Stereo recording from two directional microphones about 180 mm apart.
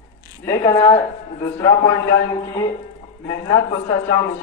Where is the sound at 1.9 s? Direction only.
60° left (ahead or behind).